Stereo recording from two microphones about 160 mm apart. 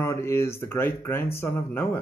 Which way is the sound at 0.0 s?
15° left (ahead or behind).